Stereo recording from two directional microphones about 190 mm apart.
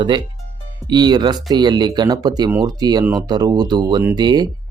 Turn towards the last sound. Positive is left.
turn(degrees=-20)  # may be behind; listen again after turning